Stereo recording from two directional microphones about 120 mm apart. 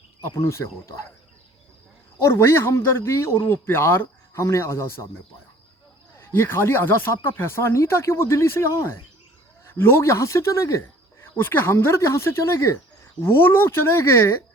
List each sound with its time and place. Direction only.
0.3 s speech: 25° left (ahead or behind)
2.2 s speech: 20° left (ahead or behind)
6.1 s speech: 20° left (ahead or behind)